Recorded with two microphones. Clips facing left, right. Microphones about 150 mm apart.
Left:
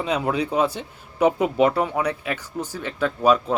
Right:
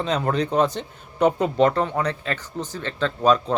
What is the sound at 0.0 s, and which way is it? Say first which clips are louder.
Speech: even; 10° left (ahead or behind).